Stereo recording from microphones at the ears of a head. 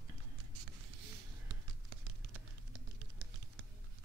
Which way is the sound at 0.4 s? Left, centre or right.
Right.